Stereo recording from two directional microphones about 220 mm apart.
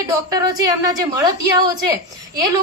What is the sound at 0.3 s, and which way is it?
A woman's voice, 15° right (ahead or behind).